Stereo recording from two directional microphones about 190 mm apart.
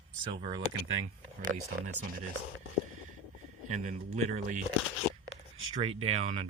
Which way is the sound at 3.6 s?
40° right (ahead or behind).